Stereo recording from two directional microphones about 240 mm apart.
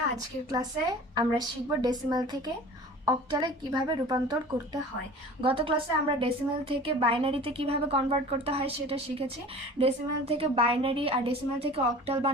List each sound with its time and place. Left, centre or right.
0.5 s a woman's voice: centre